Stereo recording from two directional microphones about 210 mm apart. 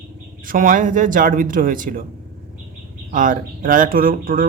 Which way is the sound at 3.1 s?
40° right (ahead or behind).